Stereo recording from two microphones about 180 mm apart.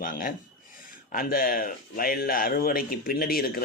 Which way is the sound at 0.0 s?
50° left (ahead or behind).